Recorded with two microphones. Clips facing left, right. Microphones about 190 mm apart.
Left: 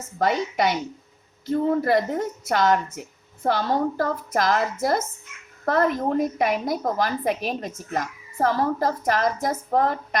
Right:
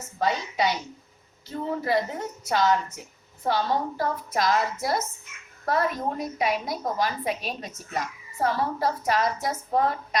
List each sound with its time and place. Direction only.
0.2 s a woman's voice: 55° left (ahead or behind)